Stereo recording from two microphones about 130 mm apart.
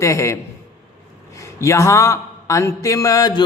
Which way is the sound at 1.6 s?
20° left (ahead or behind).